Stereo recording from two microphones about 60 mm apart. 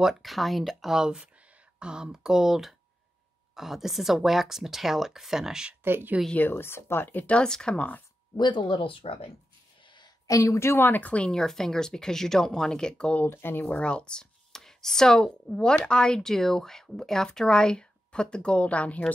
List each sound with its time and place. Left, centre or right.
0.0 s speech: centre
5.9 s speech: right
6.3 s speech: left
6.6 s speech: left
7.2 s speech: centre
10.2 s a woman's voice: left
11.2 s speech: centre
13.2 s speech: left
13.7 s speech: centre